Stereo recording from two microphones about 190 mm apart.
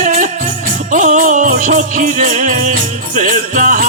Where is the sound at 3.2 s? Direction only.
45° right (ahead or behind).